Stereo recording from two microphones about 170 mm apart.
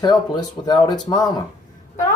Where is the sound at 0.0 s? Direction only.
25° left (ahead or behind).